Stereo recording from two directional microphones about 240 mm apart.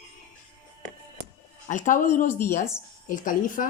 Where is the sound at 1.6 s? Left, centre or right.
Left.